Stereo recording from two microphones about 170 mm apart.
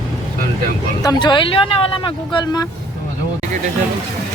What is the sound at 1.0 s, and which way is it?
Speech, 25° left (ahead or behind).